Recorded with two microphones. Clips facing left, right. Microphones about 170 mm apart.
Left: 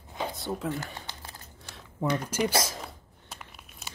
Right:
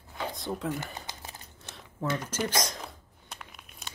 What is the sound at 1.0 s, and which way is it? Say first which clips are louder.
Crumpling: right 1 dB; 20° right (ahead or behind).